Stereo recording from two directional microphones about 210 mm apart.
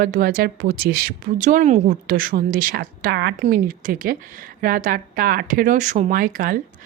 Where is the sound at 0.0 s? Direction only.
40° right (ahead or behind).